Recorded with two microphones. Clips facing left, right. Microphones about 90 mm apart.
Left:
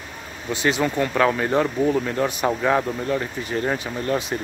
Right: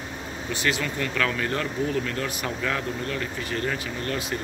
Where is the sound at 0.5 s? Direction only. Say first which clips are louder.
Left 6 dB; 20° left (ahead or behind).